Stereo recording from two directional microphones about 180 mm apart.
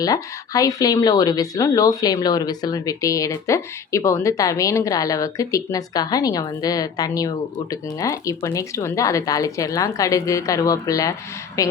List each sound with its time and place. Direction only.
0.0 s speech: 20° left (ahead or behind)